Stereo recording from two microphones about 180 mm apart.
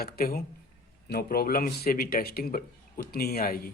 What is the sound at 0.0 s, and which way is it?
Speech, 55° left (ahead or behind).